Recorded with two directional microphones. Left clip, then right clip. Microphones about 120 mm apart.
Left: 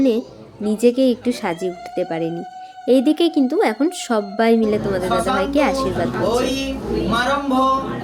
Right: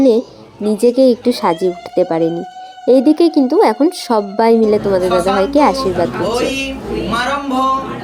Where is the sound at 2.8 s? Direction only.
20° right (ahead or behind).